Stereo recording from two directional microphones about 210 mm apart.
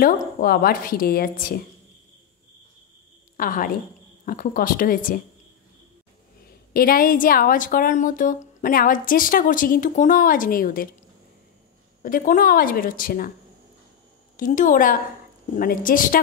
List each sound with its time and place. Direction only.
0.0 s a woman's voice: 45° left (ahead or behind)
3.3 s a woman's voice: 40° left (ahead or behind)
6.7 s a woman's voice: 45° left (ahead or behind)
12.0 s a woman's voice: 40° left (ahead or behind)
14.3 s a woman's voice: 40° left (ahead or behind)